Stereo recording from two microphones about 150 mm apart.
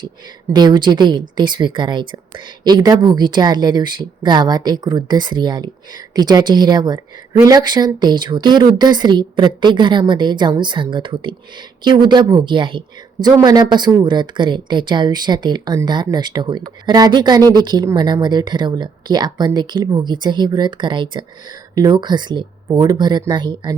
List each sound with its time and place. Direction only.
0.5 s speech: 30° right (ahead or behind)